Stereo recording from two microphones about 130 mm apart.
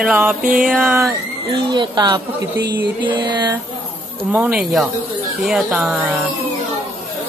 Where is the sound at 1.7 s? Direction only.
35° right (ahead or behind).